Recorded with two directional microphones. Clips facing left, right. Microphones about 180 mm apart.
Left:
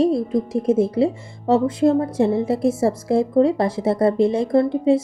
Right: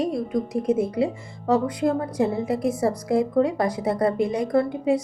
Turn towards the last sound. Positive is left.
turn(degrees=30)  # may be behind; listen again after turning